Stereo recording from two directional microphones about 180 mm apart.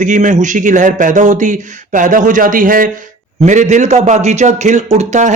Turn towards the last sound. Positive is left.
turn(degrees=-40)  # may be behind; listen again after turning